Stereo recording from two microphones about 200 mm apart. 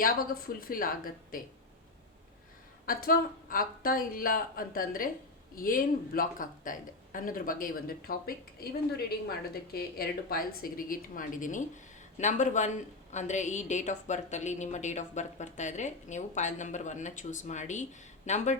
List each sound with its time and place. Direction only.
0.0 s speech: 45° left (ahead or behind)
2.8 s speech: 45° left (ahead or behind)
10.6 s a woman's voice: 45° left (ahead or behind)